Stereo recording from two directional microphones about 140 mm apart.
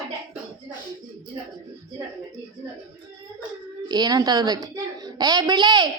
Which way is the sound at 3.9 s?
30° right (ahead or behind).